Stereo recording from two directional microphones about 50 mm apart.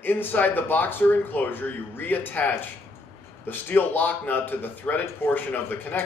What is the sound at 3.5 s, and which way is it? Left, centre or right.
Speech, left.